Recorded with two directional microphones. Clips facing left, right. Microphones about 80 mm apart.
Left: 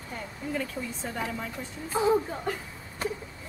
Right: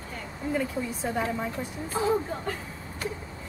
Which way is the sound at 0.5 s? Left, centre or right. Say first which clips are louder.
Right 4 dB; centre.